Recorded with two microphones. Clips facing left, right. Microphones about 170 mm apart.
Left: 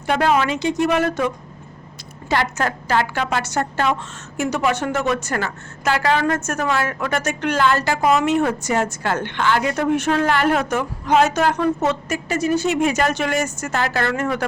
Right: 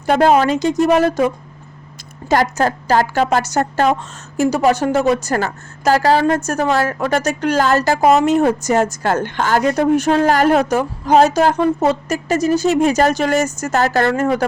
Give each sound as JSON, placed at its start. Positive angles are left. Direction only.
{"t": 0.0, "sound": "a woman's voice", "side_deg": -40}
{"t": 2.3, "sound": "a woman's voice", "side_deg": -40}